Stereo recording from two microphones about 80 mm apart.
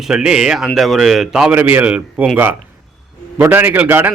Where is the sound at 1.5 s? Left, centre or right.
Right.